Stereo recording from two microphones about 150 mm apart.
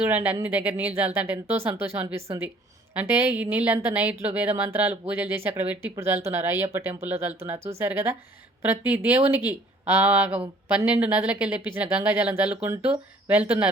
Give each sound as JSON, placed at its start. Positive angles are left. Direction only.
{"t": 0.0, "sound": "a woman's voice", "side_deg": -10}